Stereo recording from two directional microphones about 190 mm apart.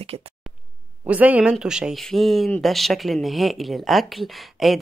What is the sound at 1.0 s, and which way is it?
Speech, 10° right (ahead or behind).